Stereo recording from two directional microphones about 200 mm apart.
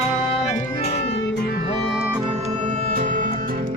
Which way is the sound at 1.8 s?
Centre (ahead or behind).